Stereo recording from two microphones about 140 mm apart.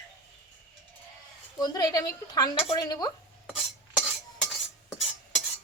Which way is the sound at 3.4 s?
5° right (ahead or behind).